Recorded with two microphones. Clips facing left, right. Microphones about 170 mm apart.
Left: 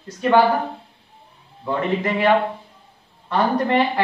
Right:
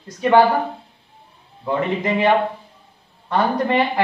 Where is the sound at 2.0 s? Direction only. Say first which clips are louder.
Right 1 dB; 20° right (ahead or behind).